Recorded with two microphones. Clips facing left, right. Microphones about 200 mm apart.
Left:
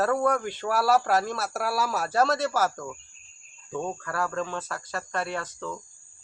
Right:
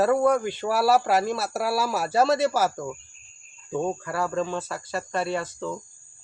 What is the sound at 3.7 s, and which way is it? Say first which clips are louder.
Speech: right 4 dB; 15° right (ahead or behind).